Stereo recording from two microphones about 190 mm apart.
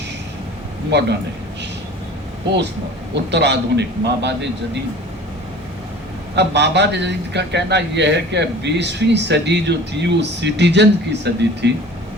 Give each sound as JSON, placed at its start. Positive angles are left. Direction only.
{"t": 0.9, "sound": "a man's voice", "side_deg": -65}
{"t": 3.3, "sound": "a man's voice", "side_deg": -65}
{"t": 6.3, "sound": "a man's voice", "side_deg": -65}